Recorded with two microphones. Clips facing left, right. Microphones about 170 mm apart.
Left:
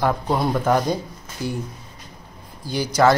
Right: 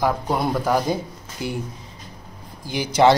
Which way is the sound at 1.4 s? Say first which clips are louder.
Left 1 dB; 20° right (ahead or behind).